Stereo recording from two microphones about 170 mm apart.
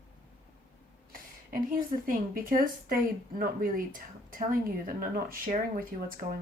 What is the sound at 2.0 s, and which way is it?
Speech, 55° right (ahead or behind).